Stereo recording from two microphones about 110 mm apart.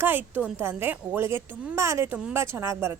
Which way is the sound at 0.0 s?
20° right (ahead or behind).